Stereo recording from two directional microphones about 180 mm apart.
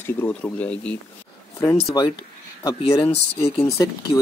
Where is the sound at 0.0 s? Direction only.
10° left (ahead or behind).